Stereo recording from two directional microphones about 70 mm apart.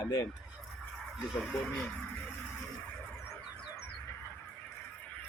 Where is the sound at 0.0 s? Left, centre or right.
Left.